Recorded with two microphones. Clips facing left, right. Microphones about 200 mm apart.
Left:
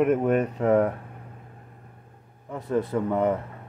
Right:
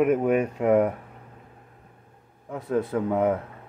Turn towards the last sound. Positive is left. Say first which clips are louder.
# right 1 dB
turn(degrees=-5)  # may be behind; listen again after turning